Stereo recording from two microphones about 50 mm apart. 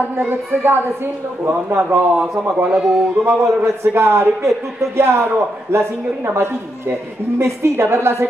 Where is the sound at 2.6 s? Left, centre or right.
Centre.